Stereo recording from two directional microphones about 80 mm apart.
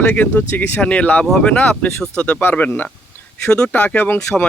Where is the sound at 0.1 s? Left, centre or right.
Left.